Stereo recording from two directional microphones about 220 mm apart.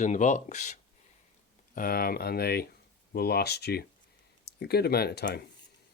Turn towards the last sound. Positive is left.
turn(degrees=45)  # may be behind; listen again after turning